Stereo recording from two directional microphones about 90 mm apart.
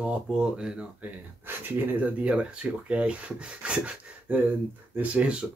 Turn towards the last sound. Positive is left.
turn(degrees=-15)  # may be behind; listen again after turning